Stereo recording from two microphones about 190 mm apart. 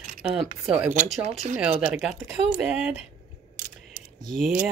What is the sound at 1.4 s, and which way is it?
Speech, 35° right (ahead or behind).